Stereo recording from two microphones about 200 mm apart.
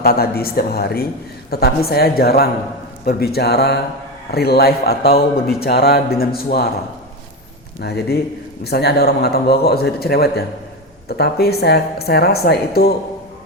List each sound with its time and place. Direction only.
0.0 s speech: 50° left (ahead or behind)
7.8 s speech: 55° left (ahead or behind)